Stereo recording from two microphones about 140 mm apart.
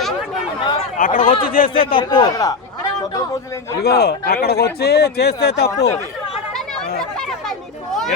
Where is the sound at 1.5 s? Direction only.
85° left.